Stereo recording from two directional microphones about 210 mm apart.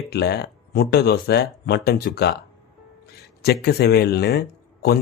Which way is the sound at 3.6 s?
50° left (ahead or behind).